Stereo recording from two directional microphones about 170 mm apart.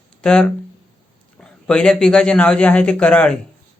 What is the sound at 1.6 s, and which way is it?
Speech, 5° left (ahead or behind).